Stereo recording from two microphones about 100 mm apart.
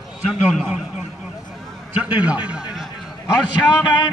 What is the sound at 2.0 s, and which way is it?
Speech, 15° right (ahead or behind).